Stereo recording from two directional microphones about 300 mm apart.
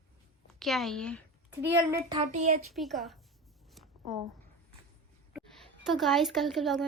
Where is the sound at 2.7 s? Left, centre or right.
Centre.